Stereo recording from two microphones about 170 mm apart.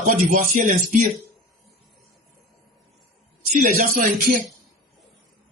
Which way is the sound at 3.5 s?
55° right (ahead or behind).